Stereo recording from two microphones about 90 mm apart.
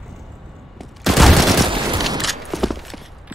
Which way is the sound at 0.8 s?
Centre (ahead or behind).